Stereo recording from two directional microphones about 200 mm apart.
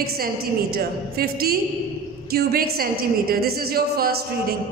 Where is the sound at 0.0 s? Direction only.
50° right (ahead or behind).